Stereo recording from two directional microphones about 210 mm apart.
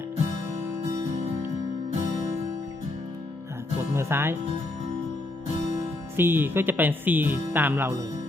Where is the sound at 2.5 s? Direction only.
20° right (ahead or behind).